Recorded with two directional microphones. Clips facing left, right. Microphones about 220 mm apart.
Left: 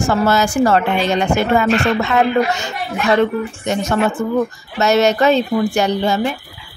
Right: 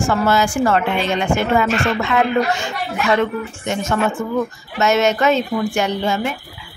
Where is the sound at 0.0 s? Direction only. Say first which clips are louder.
Left 1 dB; 40° left (ahead or behind).